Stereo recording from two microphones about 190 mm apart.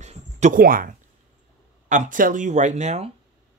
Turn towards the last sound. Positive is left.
turn(degrees=-35)  # may be behind; listen again after turning